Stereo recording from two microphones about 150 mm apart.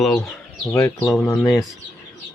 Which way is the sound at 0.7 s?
20° left (ahead or behind).